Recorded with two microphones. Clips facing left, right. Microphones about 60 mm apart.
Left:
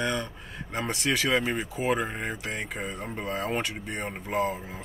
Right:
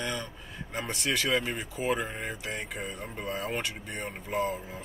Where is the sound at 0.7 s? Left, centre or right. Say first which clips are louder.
Left 3 dB; centre.